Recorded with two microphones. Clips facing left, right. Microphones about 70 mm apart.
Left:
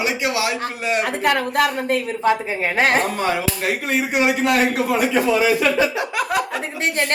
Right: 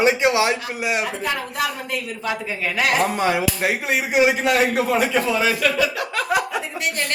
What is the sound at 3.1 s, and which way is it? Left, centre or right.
Speech, centre.